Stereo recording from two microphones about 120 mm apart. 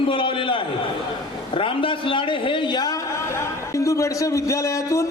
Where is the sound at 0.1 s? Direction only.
45° left (ahead or behind).